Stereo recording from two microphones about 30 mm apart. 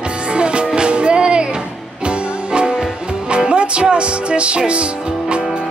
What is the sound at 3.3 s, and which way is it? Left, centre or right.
Music, right.